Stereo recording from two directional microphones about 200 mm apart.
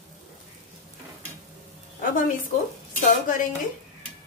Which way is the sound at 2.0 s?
45° left (ahead or behind).